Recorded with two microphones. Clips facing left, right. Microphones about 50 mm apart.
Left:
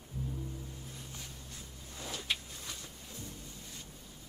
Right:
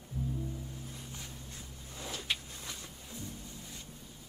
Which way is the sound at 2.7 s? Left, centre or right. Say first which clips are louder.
Right 1 dB; centre.